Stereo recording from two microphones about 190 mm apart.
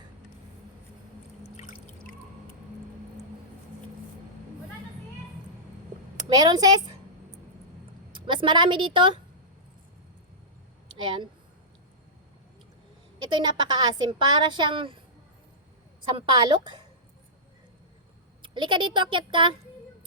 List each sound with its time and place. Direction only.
1.5 s a sound: 35° left (ahead or behind)
6.2 s a woman's voice: 20° right (ahead or behind)
8.1 s a woman's voice: 25° right (ahead or behind)
11.0 s a woman's voice: 25° right (ahead or behind)
13.3 s a woman's voice: 25° right (ahead or behind)
16.1 s a woman's voice: 25° right (ahead or behind)
18.4 s a woman's voice: 25° right (ahead or behind)